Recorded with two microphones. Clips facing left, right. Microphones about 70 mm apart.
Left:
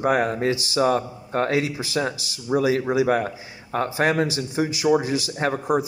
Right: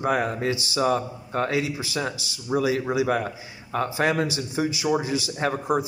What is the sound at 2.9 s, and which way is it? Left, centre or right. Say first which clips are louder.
A man's voice: left 3 dB; left.